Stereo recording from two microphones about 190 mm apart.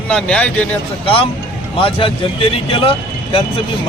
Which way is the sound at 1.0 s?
30° left (ahead or behind).